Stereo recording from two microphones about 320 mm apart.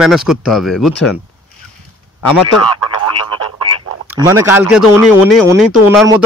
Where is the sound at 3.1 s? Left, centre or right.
Centre.